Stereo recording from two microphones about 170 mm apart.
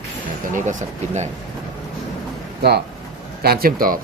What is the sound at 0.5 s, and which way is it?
Speech, 45° right (ahead or behind).